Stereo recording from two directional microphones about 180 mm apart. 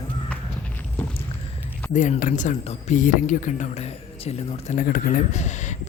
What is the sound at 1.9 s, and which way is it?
Speech, 45° left (ahead or behind).